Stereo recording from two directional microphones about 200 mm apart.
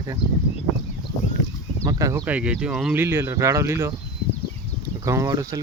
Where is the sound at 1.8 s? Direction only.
15° right (ahead or behind).